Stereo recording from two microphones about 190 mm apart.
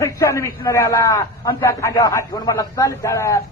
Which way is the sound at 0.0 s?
15° left (ahead or behind).